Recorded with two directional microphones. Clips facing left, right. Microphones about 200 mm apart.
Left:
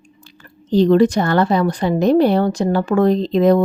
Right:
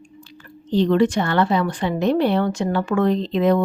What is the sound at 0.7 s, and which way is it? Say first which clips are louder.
A woman's voice: left 4 dB; 40° left (ahead or behind).